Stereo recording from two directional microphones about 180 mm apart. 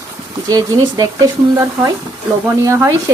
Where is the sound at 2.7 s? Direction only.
15° right (ahead or behind).